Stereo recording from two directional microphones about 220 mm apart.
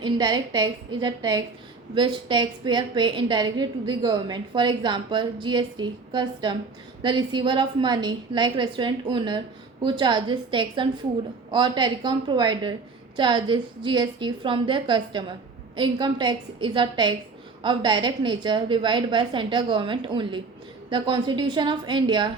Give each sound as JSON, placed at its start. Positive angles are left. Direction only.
{"t": 0.0, "sound": "a woman's voice", "side_deg": -20}